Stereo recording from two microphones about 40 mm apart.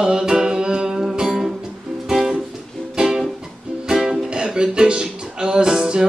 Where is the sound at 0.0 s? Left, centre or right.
Centre.